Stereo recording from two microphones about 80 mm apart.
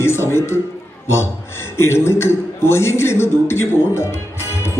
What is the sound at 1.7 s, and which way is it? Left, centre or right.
Speech, left.